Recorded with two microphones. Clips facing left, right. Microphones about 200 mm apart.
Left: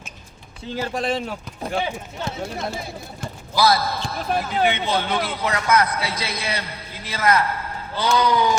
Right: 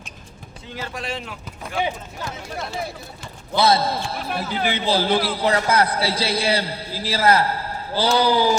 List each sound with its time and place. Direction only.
0.7 s speech: 35° left (ahead or behind)
3.5 s speech: 25° right (ahead or behind)